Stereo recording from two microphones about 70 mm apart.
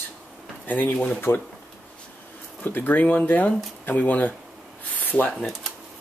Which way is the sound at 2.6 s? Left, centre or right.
Left.